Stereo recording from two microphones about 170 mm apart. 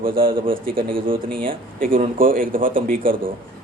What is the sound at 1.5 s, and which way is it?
A man's voice, 55° right (ahead or behind).